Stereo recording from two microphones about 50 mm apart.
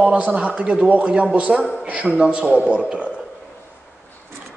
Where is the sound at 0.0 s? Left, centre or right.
Right.